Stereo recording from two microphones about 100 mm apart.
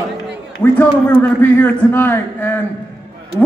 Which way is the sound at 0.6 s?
20° left (ahead or behind).